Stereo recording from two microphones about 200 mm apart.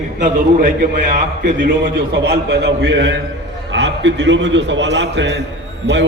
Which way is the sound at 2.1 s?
60° right (ahead or behind).